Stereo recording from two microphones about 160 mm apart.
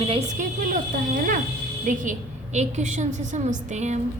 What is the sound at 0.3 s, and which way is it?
A woman's voice, 55° right (ahead or behind).